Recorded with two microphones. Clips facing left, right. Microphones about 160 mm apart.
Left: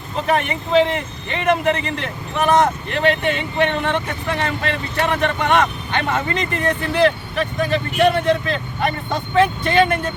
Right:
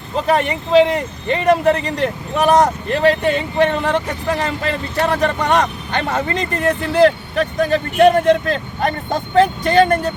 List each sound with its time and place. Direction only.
0.3 s speech: 35° right (ahead or behind)